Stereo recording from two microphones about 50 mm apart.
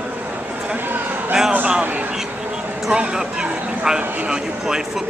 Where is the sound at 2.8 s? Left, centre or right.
Centre.